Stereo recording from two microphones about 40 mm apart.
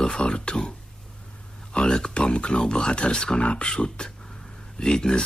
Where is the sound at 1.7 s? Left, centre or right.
Left.